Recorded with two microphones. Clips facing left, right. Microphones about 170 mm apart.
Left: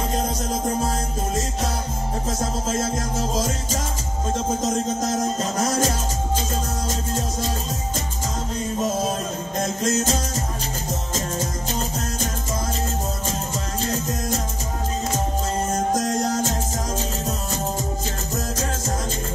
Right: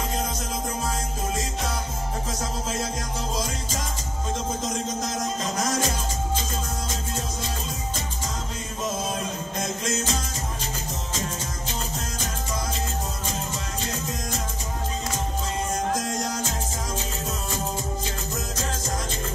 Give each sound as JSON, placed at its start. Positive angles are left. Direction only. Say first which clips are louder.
{"t": 0.1, "sound": "music", "louder": "left 5 dB", "side_deg": 40}
{"t": 2.7, "sound": "music", "louder": "left 5 dB", "side_deg": 45}
{"t": 9.8, "sound": "music", "louder": "left 7 dB", "side_deg": 40}
{"t": 13.8, "sound": "music", "louder": "left 7 dB", "side_deg": 40}
{"t": 15.7, "sound": "music", "louder": "left 5 dB", "side_deg": 40}